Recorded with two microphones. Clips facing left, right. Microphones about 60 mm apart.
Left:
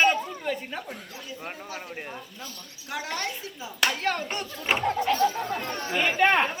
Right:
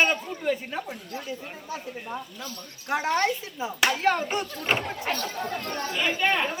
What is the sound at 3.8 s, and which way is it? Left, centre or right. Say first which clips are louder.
Speech: right 3 dB; centre.